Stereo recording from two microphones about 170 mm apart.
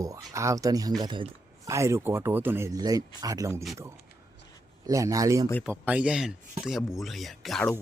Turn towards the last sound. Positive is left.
turn(degrees=5)  # may be behind; listen again after turning